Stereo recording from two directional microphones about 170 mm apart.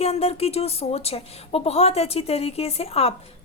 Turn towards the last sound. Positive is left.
turn(degrees=35)  # may be behind; listen again after turning